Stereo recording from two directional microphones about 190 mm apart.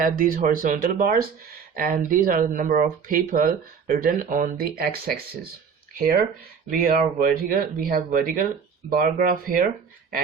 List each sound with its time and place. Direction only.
0.0 s speech: 45° right (ahead or behind)